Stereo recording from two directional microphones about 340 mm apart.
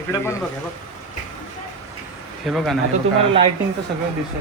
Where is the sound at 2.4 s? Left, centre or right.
Centre.